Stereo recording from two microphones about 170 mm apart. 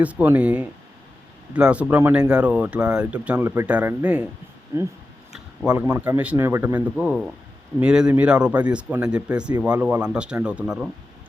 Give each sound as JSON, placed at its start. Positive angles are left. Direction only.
{"t": 0.0, "sound": "speech", "side_deg": -10}
{"t": 5.3, "sound": "a sound", "side_deg": -5}
{"t": 6.1, "sound": "speech", "side_deg": -5}